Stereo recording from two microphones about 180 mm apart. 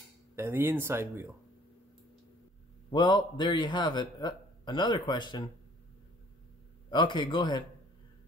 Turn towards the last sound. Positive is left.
turn(degrees=25)  # may be behind; listen again after turning